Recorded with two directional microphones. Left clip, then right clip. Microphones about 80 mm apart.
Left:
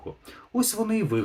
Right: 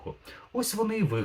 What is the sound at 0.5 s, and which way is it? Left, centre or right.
Speech, left.